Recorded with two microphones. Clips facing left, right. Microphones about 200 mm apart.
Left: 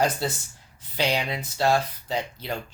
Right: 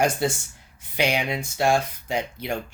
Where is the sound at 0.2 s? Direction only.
15° right (ahead or behind).